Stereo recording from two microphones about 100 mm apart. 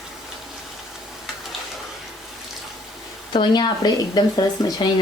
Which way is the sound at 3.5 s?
45° left (ahead or behind).